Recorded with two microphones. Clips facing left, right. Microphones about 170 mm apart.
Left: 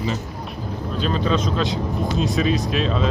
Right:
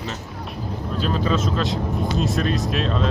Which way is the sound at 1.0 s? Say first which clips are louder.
Left 1 dB; 5° right (ahead or behind).